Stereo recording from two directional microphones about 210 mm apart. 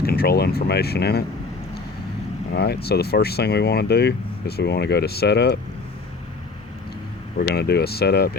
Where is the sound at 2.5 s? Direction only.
50° left (ahead or behind).